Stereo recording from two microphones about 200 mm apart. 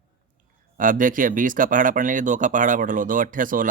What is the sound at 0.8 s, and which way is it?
Speech, 40° right (ahead or behind).